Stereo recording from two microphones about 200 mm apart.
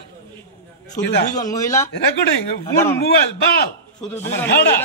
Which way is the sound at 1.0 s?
15° left (ahead or behind).